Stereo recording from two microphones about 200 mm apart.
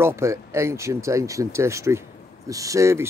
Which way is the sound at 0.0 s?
15° right (ahead or behind).